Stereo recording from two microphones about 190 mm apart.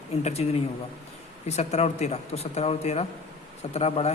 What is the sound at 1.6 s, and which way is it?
Speech, 35° left (ahead or behind).